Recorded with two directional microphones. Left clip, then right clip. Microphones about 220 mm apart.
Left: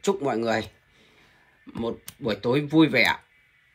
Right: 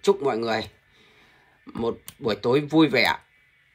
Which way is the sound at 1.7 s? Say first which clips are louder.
Right 3 dB; 5° right (ahead or behind).